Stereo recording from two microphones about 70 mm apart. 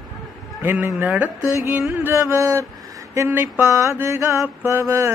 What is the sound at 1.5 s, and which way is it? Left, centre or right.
Mantra, right.